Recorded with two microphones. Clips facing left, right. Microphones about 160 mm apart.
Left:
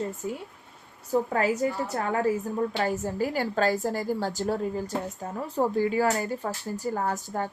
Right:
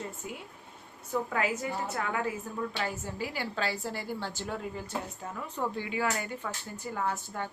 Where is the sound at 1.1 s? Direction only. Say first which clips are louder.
Left 6 dB; 35° left (ahead or behind).